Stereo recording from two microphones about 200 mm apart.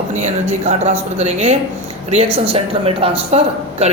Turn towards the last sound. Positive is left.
turn(degrees=-30)  # may be behind; listen again after turning